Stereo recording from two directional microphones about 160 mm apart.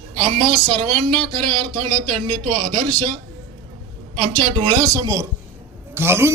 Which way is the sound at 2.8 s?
25° right (ahead or behind).